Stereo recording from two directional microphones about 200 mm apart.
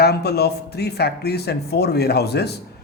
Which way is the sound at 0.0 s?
55° left (ahead or behind).